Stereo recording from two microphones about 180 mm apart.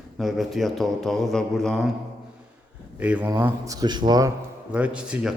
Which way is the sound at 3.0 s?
10° right (ahead or behind).